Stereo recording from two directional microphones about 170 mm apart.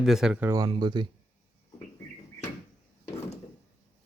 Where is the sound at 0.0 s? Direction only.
5° right (ahead or behind).